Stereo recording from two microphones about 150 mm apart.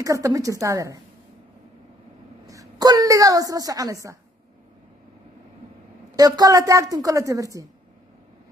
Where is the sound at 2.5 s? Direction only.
25° right (ahead or behind).